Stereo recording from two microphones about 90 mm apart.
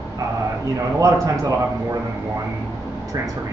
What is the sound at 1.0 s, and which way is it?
A man's voice, 40° right (ahead or behind).